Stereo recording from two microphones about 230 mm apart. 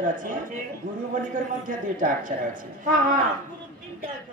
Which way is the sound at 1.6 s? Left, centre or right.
Right.